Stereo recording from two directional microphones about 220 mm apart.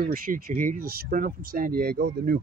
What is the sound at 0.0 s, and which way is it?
Speech, 40° right (ahead or behind).